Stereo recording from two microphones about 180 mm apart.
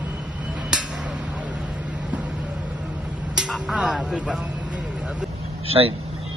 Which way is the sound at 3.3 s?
Centre (ahead or behind).